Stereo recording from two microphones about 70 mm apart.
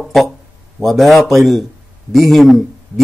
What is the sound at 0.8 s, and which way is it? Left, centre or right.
A man's voice, centre.